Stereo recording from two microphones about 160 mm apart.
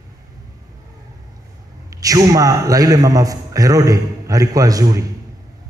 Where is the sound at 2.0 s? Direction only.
20° right (ahead or behind).